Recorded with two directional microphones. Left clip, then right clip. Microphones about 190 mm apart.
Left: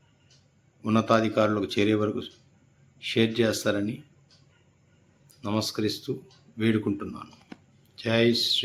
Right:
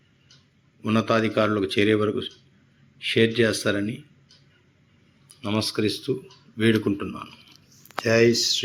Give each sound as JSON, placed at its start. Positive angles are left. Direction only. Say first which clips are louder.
{"t": 0.8, "sound": "a man's voice", "louder": "right 1 dB", "side_deg": 5}
{"t": 5.4, "sound": "a man's voice", "louder": "right 3 dB", "side_deg": 0}
{"t": 8.3, "sound": "speech", "louder": "right 3 dB", "side_deg": 15}